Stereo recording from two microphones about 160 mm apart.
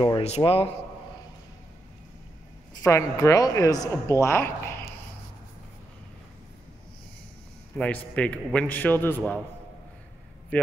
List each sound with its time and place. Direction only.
0.2 s speech: 40° left (ahead or behind)
2.8 s a woman's voice: 20° left (ahead or behind)
7.7 s a woman's voice: 5° left (ahead or behind)
10.5 s a sound: 10° left (ahead or behind)